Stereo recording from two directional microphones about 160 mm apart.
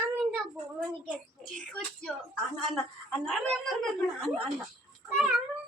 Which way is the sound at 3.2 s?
5° left (ahead or behind).